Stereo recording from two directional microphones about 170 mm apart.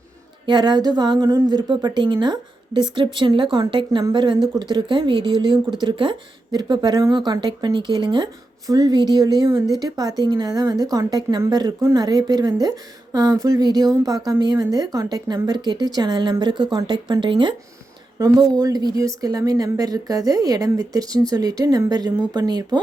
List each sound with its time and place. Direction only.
0.4 s a woman's voice: 25° right (ahead or behind)